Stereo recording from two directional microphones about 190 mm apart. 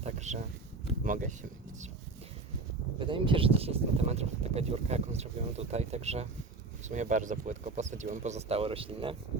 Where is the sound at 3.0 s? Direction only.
25° right (ahead or behind).